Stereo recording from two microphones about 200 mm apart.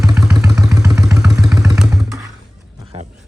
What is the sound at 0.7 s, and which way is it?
Vehicle, 15° right (ahead or behind).